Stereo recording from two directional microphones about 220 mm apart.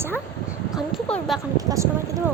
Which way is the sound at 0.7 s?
Centre (ahead or behind).